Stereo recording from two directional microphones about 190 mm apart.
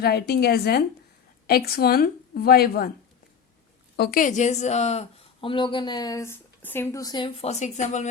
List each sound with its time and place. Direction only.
0.0 s a woman's voice: 55° left (ahead or behind)
3.9 s a woman's voice: 55° left (ahead or behind); by 8.1 s 40° left (ahead or behind)